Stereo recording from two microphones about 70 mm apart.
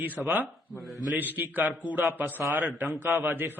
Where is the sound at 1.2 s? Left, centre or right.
Right.